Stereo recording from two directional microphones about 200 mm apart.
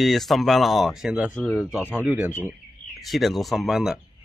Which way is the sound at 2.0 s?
5° right (ahead or behind).